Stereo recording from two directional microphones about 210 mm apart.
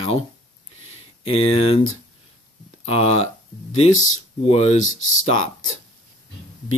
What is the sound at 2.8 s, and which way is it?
Speech, 30° left (ahead or behind).